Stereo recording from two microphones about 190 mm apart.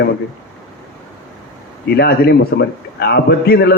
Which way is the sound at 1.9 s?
55° left (ahead or behind).